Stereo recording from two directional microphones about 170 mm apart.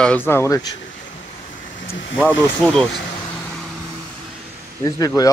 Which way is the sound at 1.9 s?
90° left.